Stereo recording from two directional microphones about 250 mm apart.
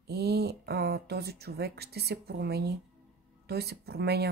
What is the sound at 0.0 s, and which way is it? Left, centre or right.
Speech, right.